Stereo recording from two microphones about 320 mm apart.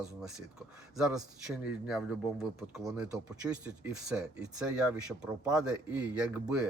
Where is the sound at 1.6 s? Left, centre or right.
Centre.